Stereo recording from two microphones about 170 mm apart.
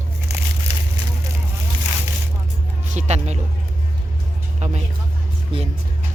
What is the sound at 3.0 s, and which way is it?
Speech, 40° right (ahead or behind).